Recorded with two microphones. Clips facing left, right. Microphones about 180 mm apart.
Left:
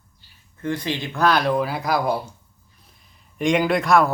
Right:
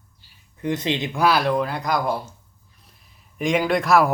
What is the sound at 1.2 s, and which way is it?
Speech, 5° right (ahead or behind).